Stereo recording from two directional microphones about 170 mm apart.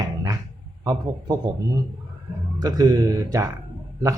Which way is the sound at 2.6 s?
20° right (ahead or behind).